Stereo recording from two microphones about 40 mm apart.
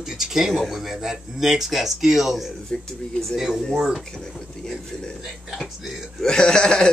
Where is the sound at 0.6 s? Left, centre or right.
Centre.